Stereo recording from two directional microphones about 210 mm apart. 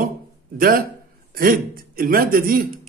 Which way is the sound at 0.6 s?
45° right (ahead or behind).